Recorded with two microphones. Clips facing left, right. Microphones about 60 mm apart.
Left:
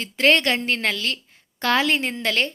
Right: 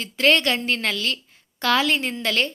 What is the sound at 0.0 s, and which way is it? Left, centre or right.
A woman's voice, left.